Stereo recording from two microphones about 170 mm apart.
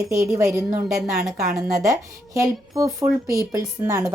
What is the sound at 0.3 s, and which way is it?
Speech, 15° right (ahead or behind).